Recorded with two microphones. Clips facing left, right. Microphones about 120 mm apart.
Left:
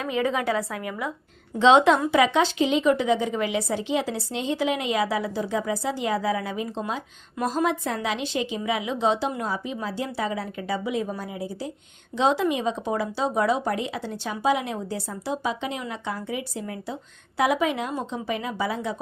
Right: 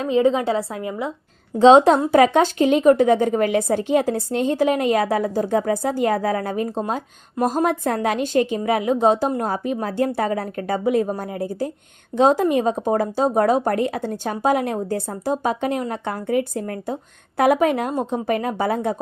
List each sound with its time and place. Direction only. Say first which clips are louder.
0.0 s a woman's voice: right 7 dB; 30° right (ahead or behind); by 18.9 s 50° right (ahead or behind)